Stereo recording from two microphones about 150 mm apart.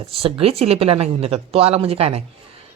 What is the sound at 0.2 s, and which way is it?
Speech, 40° right (ahead or behind).